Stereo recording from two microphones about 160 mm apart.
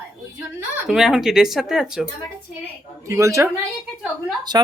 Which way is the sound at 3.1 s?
20° right (ahead or behind).